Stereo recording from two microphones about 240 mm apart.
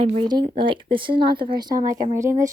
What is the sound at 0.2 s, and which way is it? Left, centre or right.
Speech, right.